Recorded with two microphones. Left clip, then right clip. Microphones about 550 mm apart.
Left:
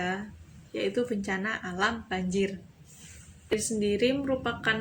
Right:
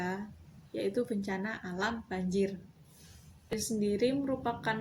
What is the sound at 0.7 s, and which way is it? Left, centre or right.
A woman's voice, right.